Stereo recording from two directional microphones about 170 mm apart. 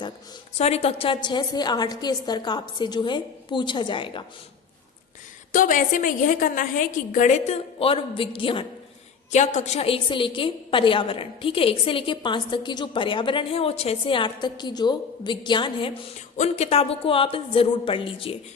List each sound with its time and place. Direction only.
0.5 s a woman's voice: 40° left (ahead or behind)
5.5 s a woman's voice: 50° left (ahead or behind); by 8.6 s 30° left (ahead or behind)
9.3 s a woman's voice: 45° left (ahead or behind); by 15.9 s 30° left (ahead or behind)
16.4 s a woman's voice: 40° left (ahead or behind)